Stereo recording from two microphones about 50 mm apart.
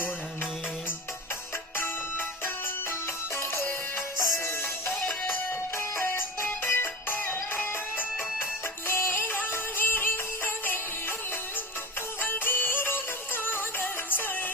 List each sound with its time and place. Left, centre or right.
1.7 s music: left
3.3 s music: left
5.7 s music: left
8.9 s music: left
12.2 s music: left